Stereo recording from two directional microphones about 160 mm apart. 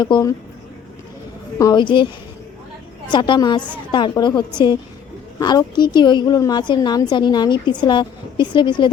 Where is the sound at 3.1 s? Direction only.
30° left (ahead or behind).